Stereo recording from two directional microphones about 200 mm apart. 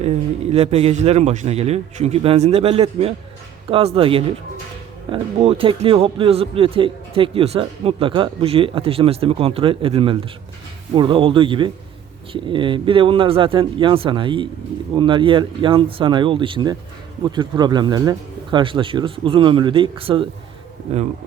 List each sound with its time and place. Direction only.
0.5 s a man's voice: 30° right (ahead or behind)